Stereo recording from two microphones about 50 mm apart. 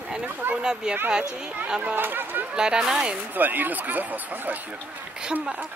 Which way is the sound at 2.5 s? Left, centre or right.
Centre.